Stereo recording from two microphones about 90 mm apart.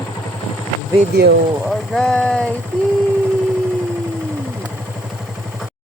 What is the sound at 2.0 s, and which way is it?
Speech, 5° left (ahead or behind).